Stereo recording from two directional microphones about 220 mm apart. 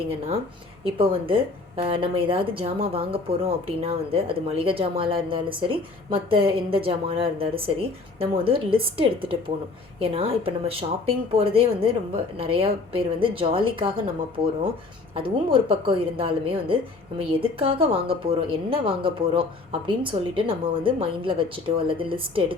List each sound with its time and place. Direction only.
0.9 s speech: 25° right (ahead or behind)